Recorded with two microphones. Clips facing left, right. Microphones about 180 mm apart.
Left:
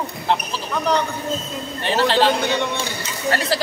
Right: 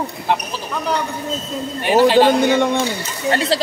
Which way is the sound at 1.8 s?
15° right (ahead or behind).